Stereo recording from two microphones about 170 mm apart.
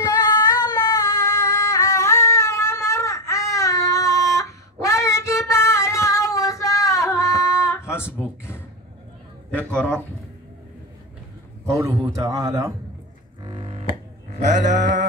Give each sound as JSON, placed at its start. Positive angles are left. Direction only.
{"t": 0.0, "sound": "singing", "side_deg": 25}
{"t": 9.5, "sound": "a man's voice", "side_deg": 10}
{"t": 11.7, "sound": "a man's voice", "side_deg": -20}
{"t": 13.4, "sound": "double bass", "side_deg": -30}